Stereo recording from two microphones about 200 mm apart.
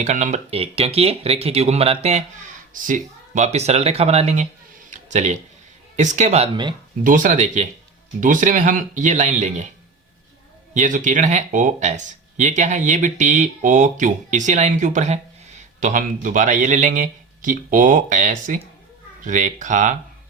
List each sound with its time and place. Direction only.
0.0 s speech: 35° right (ahead or behind)
4.9 s a sound: 35° right (ahead or behind)
6.0 s speech: 35° right (ahead or behind)
7.0 s speech: 40° right (ahead or behind)
10.8 s speech: 40° right (ahead or behind)